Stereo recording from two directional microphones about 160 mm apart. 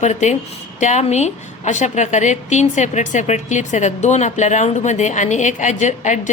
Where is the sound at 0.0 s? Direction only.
45° left (ahead or behind).